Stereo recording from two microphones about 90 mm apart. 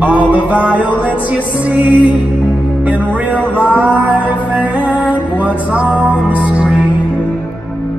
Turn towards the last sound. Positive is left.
turn(degrees=-10)  # may be behind; listen again after turning